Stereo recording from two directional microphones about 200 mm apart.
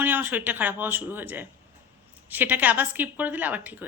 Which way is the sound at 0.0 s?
10° right (ahead or behind).